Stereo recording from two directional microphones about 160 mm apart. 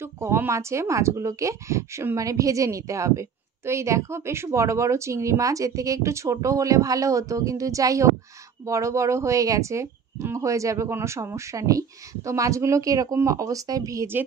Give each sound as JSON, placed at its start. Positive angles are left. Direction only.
{"t": 0.0, "sound": "speech", "side_deg": -15}